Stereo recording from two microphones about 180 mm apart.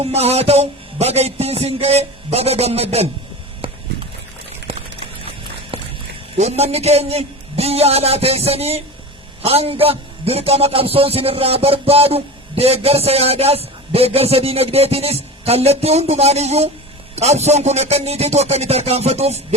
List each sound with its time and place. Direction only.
0.0 s a man's voice: 35° right (ahead or behind)
4.7 s a sound: 30° right (ahead or behind)
6.3 s a man's voice: 40° right (ahead or behind)